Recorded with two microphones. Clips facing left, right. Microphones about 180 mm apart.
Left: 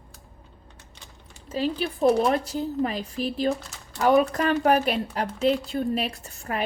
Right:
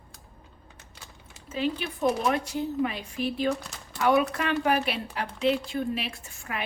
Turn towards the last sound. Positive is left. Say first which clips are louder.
# left 5 dB
turn(degrees=35)  # may be behind; listen again after turning